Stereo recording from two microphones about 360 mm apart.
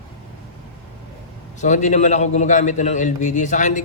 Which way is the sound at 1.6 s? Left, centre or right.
Centre.